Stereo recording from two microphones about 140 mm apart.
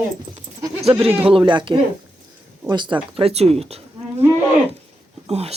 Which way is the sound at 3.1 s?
45° right (ahead or behind).